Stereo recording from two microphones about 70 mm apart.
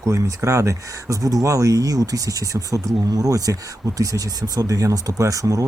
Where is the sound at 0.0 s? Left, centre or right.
Right.